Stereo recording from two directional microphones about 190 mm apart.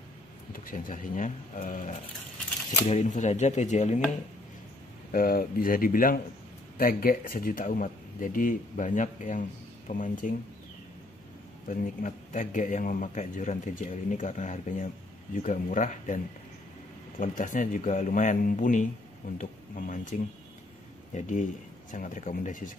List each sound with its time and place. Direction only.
0.5 s a man's voice: 45° left (ahead or behind)
5.1 s speech: 50° left (ahead or behind)
11.7 s a man's voice: 45° left (ahead or behind)
17.2 s a man's voice: 40° left (ahead or behind)